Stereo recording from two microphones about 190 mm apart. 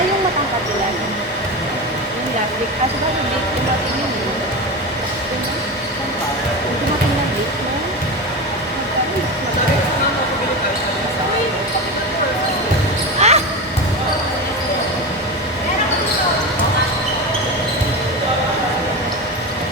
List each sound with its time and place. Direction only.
13.2 s basketball bounce: 35° right (ahead or behind)